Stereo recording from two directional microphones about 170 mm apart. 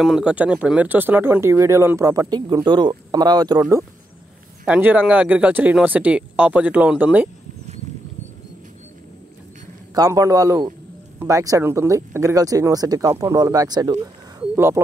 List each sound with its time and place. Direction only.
0.0 s speech: 5° right (ahead or behind); by 3.6 s 25° right (ahead or behind)
4.6 s speech: 10° right (ahead or behind)
9.9 s speech: 20° right (ahead or behind)
14.5 s bird: 15° right (ahead or behind)